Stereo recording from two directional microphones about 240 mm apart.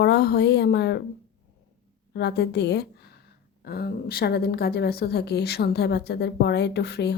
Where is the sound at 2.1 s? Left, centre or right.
Left.